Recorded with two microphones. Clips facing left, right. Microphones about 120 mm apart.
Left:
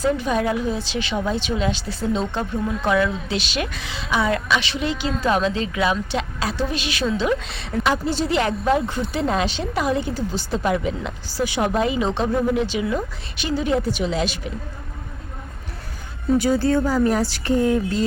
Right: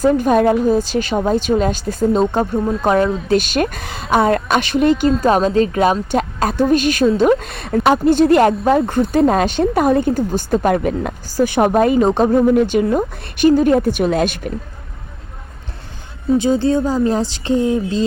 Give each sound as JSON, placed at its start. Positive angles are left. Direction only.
{"t": 0.0, "sound": "a woman's voice", "side_deg": -50}
{"t": 16.4, "sound": "speech", "side_deg": -20}